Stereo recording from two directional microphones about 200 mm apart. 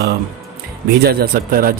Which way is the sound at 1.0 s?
50° right (ahead or behind).